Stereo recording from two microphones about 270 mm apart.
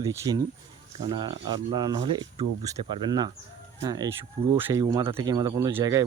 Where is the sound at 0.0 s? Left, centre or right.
Centre.